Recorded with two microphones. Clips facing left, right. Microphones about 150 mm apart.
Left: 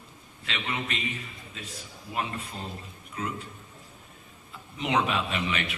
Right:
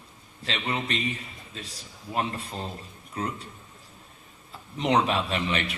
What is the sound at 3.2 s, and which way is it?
Speech, 35° right (ahead or behind).